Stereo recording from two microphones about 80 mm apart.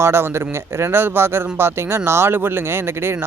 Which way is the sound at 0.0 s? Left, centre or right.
Right.